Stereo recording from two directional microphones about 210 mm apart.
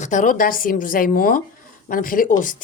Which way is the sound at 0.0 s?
35° left (ahead or behind).